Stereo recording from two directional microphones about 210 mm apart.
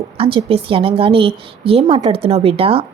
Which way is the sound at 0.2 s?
25° right (ahead or behind).